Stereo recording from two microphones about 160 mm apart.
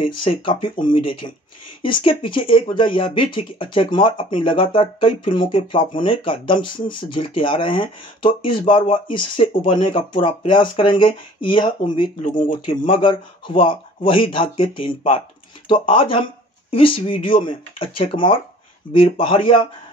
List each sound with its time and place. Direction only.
0.0 s speech: 35° left (ahead or behind)